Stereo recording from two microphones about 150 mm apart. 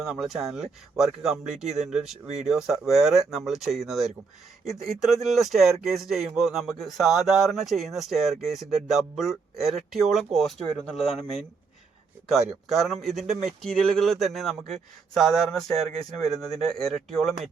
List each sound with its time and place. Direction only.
0.1 s speech: centre (ahead or behind)
12.6 s speech: centre (ahead or behind)